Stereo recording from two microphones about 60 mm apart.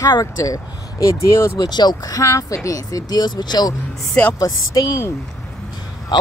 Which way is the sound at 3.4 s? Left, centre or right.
Left.